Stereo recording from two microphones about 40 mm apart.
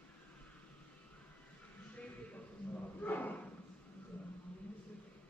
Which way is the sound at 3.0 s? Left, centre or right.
Left.